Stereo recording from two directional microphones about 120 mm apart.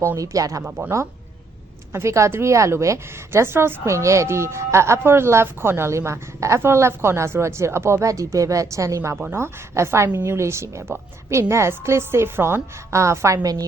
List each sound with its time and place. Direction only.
0.0 s a woman's voice: 25° right (ahead or behind)
1.9 s a woman's voice: 25° right (ahead or behind)